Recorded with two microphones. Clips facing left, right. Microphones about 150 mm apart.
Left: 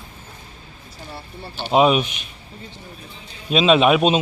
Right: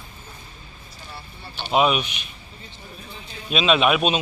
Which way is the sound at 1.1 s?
35° left (ahead or behind).